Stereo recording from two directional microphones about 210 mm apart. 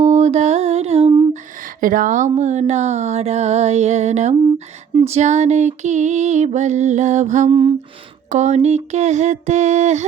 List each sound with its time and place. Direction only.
0.0 s music: 35° right (ahead or behind)
4.9 s female singing: 30° right (ahead or behind)